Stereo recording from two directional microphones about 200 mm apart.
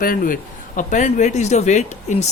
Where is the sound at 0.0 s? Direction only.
45° left (ahead or behind).